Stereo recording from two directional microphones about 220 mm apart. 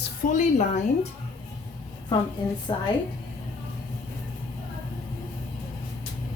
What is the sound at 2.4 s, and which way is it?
Speech, 20° left (ahead or behind).